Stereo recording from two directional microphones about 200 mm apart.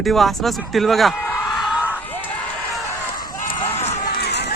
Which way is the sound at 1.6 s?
5° right (ahead or behind).